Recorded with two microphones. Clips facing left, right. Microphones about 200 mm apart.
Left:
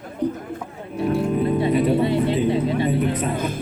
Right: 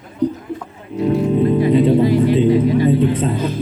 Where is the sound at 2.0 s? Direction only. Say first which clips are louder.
Right 6 dB; 25° left (ahead or behind).